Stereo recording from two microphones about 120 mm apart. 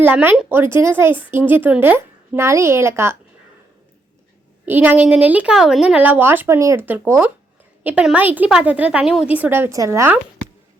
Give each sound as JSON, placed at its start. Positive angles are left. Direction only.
{"t": 0.0, "sound": "a woman's voice", "side_deg": -15}
{"t": 4.6, "sound": "a woman's voice", "side_deg": -15}